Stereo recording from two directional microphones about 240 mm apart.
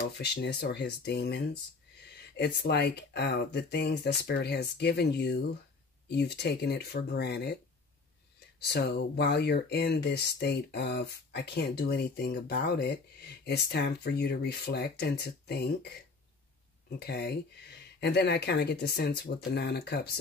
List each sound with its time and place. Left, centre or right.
0.2 s speech: left
8.5 s speech: left
17.0 s speech: left